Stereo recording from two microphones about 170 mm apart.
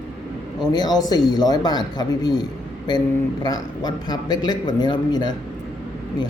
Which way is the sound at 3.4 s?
25° left (ahead or behind).